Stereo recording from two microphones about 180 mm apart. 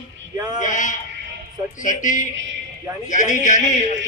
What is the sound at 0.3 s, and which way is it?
Speech, 20° right (ahead or behind).